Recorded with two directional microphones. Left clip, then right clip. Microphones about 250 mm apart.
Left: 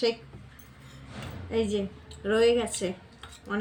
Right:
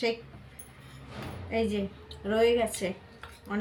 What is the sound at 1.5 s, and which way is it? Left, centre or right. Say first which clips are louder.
A woman's voice: left 2 dB; centre.